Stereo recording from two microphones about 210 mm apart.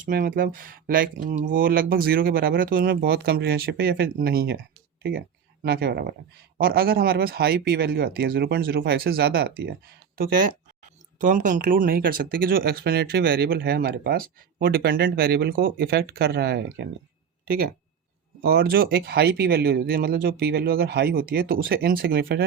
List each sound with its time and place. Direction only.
0.0 s speech: 40° right (ahead or behind)
5.6 s speech: 50° right (ahead or behind)
11.2 s speech: 40° right (ahead or behind); by 16.8 s 55° right (ahead or behind)
18.4 s speech: 45° right (ahead or behind)